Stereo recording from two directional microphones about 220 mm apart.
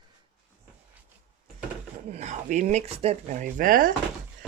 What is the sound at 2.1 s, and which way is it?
Speech, 30° right (ahead or behind).